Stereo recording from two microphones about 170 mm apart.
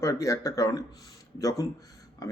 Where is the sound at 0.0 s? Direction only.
20° left (ahead or behind).